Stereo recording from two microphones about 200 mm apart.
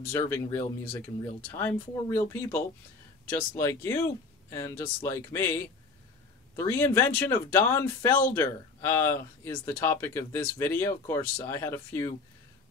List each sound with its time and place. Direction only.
0.1 s speech: 10° left (ahead or behind)